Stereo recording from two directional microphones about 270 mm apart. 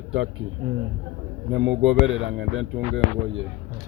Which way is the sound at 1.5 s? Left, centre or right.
Right.